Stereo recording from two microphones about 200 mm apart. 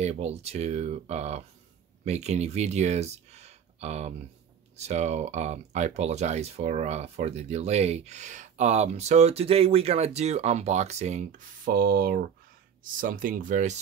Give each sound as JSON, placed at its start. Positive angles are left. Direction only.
{"t": 0.0, "sound": "speech", "side_deg": -30}